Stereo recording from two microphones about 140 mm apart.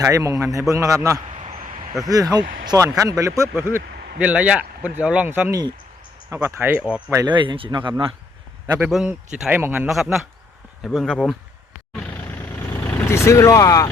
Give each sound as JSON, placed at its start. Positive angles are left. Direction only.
{"t": 0.0, "sound": "a man's voice", "side_deg": -25}
{"t": 1.3, "sound": "a sound", "side_deg": -40}
{"t": 2.0, "sound": "a man's voice", "side_deg": -25}
{"t": 7.3, "sound": "speech", "side_deg": -35}
{"t": 9.0, "sound": "speech", "side_deg": -10}
{"t": 9.9, "sound": "speech", "side_deg": 0}
{"t": 12.5, "sound": "vehicle", "side_deg": 20}
{"t": 13.0, "sound": "speech", "side_deg": 20}